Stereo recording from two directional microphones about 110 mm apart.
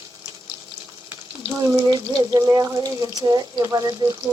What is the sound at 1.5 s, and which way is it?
Speech, 40° right (ahead or behind).